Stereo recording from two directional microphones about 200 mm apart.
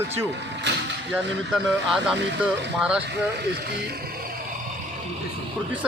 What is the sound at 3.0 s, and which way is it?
Speech, 55° right (ahead or behind).